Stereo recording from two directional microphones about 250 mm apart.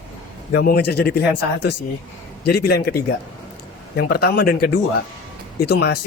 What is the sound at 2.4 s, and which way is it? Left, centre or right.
Speech, left.